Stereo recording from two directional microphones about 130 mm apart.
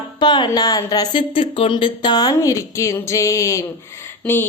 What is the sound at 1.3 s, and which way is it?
Speech, 45° left (ahead or behind).